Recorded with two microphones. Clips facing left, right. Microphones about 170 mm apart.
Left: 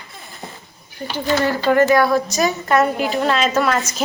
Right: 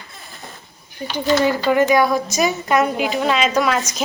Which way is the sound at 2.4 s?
15° right (ahead or behind).